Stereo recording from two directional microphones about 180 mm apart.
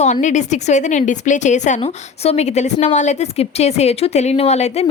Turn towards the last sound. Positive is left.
turn(degrees=35)  # may be behind; listen again after turning